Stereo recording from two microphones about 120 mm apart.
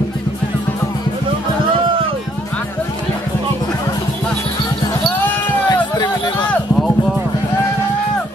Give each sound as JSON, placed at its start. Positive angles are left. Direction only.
{"t": 5.7, "sound": "music", "side_deg": 35}